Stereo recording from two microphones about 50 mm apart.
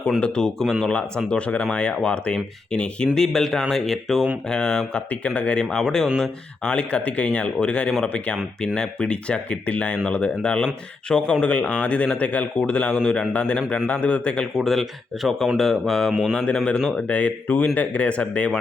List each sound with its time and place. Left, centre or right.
0.2 s speech: centre
0.9 s speech: left
3.2 s speech: centre
4.4 s speech: centre
5.7 s speech: centre
14.5 s speech: centre
16.3 s speech: left